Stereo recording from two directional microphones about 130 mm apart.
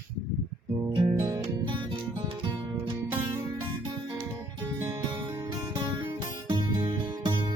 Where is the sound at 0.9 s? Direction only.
35° right (ahead or behind).